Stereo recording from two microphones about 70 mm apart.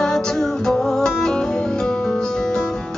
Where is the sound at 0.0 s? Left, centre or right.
Centre.